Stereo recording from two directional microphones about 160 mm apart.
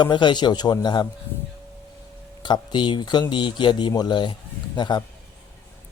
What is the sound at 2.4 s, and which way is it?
A man's voice, 30° left (ahead or behind).